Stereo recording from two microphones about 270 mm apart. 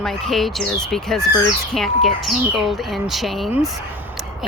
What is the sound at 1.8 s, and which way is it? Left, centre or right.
Speech, centre.